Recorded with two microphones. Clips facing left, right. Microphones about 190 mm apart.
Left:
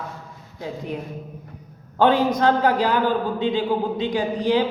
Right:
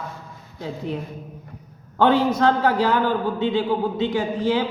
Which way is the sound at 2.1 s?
15° left (ahead or behind).